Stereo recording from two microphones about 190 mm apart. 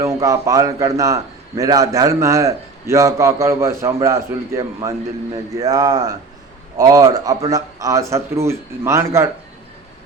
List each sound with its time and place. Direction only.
0.0 s a man's voice: 15° right (ahead or behind)